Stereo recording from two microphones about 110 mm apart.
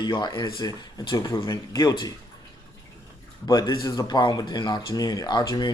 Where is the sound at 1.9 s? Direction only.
45° left (ahead or behind).